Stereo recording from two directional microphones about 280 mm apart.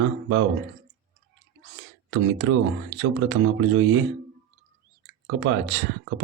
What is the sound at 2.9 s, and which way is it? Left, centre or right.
Speech, right.